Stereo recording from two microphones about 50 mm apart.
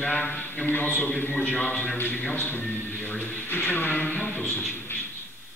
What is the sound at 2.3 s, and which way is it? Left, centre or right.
Speech, left.